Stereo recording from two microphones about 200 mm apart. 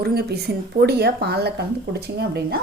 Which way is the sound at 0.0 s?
50° right (ahead or behind).